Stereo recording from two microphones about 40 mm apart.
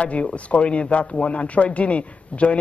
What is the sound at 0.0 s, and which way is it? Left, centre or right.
A woman's voice, left.